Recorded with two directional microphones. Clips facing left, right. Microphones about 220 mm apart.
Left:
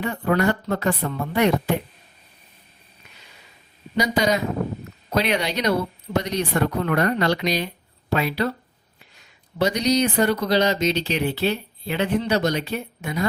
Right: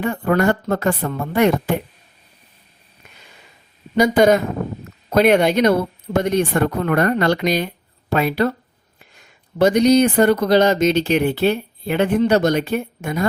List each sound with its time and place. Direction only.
0.0 s speech: 50° right (ahead or behind)
3.9 s speech: 50° right (ahead or behind)